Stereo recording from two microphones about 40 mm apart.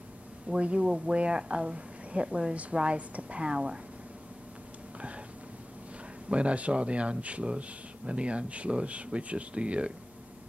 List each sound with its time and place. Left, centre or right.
0.6 s speech: right
6.2 s speech: right